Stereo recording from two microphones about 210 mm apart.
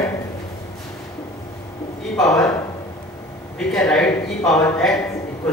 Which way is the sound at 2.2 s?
5° left (ahead or behind).